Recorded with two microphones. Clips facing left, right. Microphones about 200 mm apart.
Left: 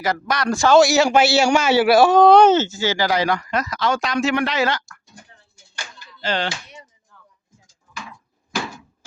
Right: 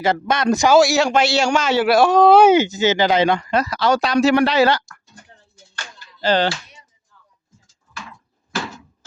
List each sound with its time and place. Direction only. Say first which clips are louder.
0.0 s a man's voice: right 4 dB; 25° right (ahead or behind)
0.7 s a man's voice: left 2 dB; centre (ahead or behind); by 4.8 s 35° right (ahead or behind)
5.2 s a sound: even; 10° left (ahead or behind)
6.2 s speech: right 6 dB; 35° right (ahead or behind)
7.1 s music: left 4 dB; 60° left (ahead or behind)